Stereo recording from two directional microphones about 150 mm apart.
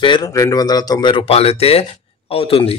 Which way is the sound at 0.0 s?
30° left (ahead or behind).